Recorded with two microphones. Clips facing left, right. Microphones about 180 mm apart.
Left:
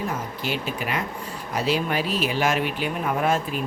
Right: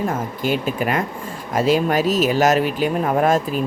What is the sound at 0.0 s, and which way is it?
Speech, 50° right (ahead or behind).